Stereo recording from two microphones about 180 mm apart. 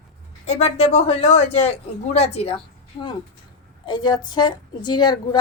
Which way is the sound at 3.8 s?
25° left (ahead or behind).